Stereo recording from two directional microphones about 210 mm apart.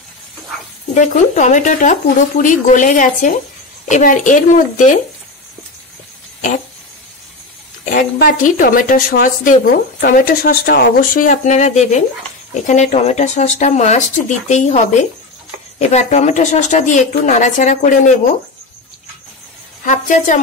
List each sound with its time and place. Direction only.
0.9 s a woman's voice: 35° left (ahead or behind)
7.8 s a woman's voice: 40° left (ahead or behind)
15.8 s a woman's voice: 35° left (ahead or behind)
19.8 s a woman's voice: 35° left (ahead or behind)